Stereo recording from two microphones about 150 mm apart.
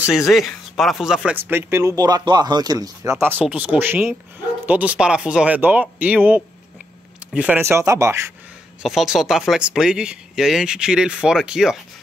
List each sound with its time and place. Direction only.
0.0 s speech: 5° right (ahead or behind); by 8.3 s 20° right (ahead or behind)
8.8 s speech: centre (ahead or behind)